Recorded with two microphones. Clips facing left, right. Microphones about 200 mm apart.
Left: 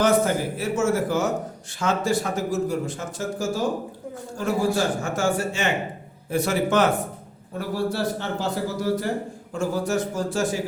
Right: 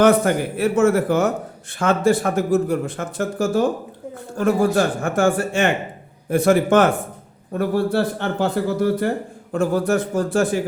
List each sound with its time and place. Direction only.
0.0 s speech: 60° right (ahead or behind)